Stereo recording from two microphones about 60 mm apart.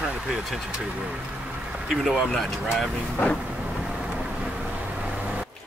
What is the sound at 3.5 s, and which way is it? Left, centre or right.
Vehicle, right.